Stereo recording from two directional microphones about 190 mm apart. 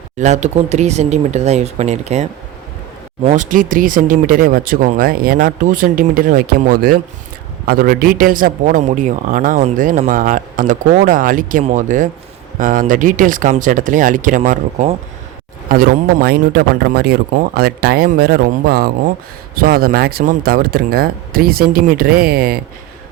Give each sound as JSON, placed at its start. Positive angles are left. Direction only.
{"t": 0.2, "sound": "speech", "side_deg": -35}
{"t": 3.2, "sound": "a man's voice", "side_deg": -40}
{"t": 15.7, "sound": "a man's voice", "side_deg": -50}